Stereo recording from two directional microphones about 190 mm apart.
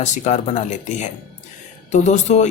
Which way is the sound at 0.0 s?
40° left (ahead or behind).